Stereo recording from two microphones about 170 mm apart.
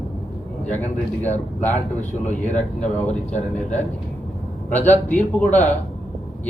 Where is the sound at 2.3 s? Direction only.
45° left (ahead or behind).